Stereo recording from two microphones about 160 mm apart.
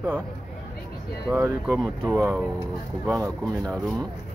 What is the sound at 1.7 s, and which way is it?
Speech, 5° left (ahead or behind).